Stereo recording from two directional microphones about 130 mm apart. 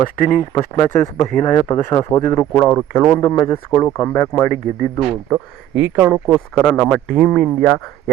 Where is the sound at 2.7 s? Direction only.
10° left (ahead or behind).